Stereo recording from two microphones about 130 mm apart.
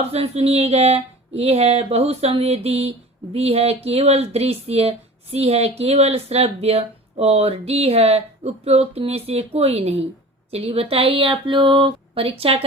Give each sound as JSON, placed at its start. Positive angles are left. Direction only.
{"t": 0.1, "sound": "speech", "side_deg": -50}